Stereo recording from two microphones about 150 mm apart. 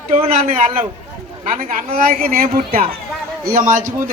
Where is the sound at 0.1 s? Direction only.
40° right (ahead or behind).